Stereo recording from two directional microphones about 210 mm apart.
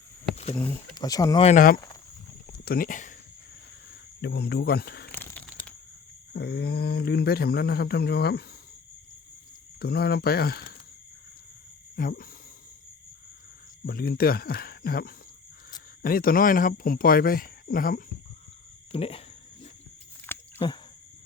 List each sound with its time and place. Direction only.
0.9 s speech: 15° left (ahead or behind)
1.5 s speech: 40° left (ahead or behind)
2.5 s a sound: 45° left (ahead or behind)
4.2 s speech: 55° left (ahead or behind)
5.1 s crumpling: 10° left (ahead or behind)
6.3 s speech: 50° left (ahead or behind)
9.8 s speech: 50° left (ahead or behind)
11.9 s speech: 45° left (ahead or behind)
13.8 s speech: 45° left (ahead or behind)
18.9 s speech: 25° left (ahead or behind)
20.3 s a sound: 10° left (ahead or behind)